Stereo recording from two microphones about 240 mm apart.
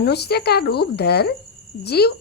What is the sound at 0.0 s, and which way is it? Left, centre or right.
Speech, left.